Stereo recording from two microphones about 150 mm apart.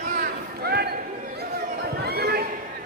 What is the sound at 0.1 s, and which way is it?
Chatter, 75° right (ahead or behind).